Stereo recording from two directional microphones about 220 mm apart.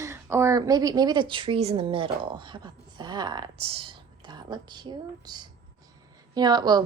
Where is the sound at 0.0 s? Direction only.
10° right (ahead or behind).